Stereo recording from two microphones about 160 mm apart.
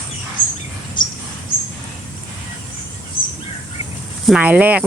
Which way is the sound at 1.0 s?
30° left (ahead or behind).